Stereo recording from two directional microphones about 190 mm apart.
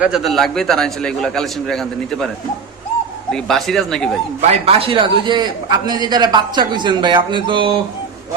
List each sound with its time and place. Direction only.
0.0 s a man's voice: centre (ahead or behind)
3.3 s a man's voice: centre (ahead or behind)
4.4 s a man's voice: 30° right (ahead or behind)